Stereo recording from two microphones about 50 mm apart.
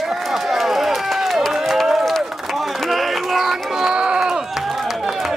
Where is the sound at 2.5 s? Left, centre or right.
Centre.